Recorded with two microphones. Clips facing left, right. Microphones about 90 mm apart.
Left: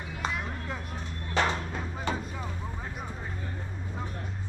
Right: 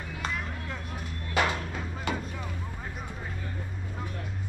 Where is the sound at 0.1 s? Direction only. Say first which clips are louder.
Left 1 dB; centre (ahead or behind).